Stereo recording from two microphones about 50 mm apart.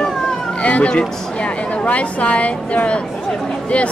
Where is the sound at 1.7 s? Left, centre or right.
Left.